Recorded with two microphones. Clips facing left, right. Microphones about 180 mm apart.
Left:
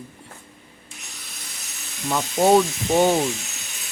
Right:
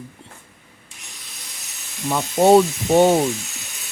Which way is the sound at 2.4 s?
25° right (ahead or behind).